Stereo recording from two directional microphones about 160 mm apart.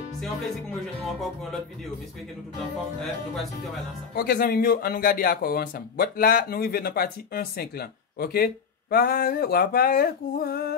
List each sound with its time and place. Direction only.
0.2 s music: centre (ahead or behind)
4.1 s speech: 70° left (ahead or behind)